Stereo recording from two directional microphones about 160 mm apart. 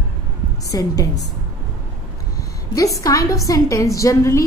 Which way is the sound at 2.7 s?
20° left (ahead or behind).